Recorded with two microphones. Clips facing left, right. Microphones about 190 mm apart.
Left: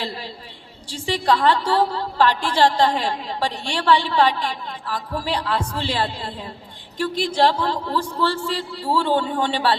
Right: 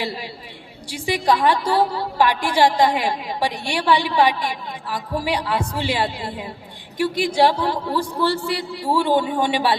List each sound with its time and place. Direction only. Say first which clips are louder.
0.9 s a woman's voice: right 1 dB; 10° right (ahead or behind)